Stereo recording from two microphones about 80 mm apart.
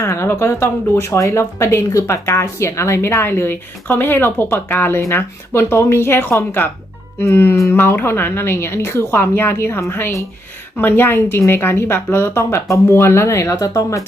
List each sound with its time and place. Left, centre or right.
0.0 s speech: left